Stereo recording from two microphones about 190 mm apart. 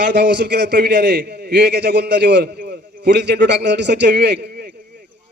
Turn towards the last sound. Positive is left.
turn(degrees=-60)  # may be behind; listen again after turning